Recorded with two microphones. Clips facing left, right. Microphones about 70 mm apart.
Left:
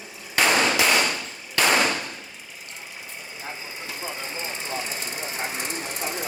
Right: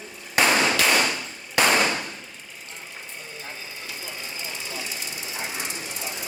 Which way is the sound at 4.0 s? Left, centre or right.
Left.